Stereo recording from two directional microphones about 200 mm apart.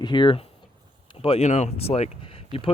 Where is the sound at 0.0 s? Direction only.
25° left (ahead or behind).